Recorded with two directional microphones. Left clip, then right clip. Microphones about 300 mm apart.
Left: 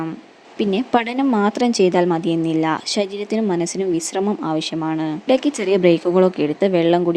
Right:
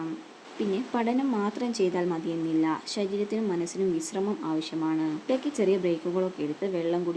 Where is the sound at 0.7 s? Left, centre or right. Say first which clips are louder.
Left 9 dB; left.